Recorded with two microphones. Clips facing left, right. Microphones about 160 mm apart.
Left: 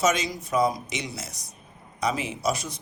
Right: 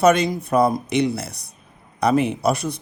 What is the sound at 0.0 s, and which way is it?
Speech, 60° right (ahead or behind).